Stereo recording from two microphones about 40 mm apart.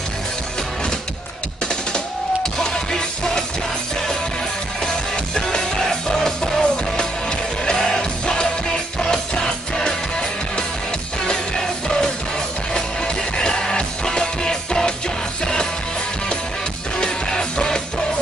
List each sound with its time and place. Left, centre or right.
2.6 s music: centre
4.8 s music: centre
11.2 s music: centre
17.0 s music: centre